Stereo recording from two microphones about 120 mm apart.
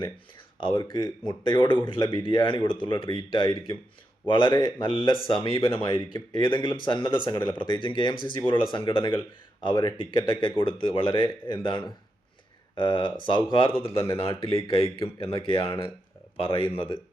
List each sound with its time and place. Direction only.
0.6 s speech: 45° left (ahead or behind)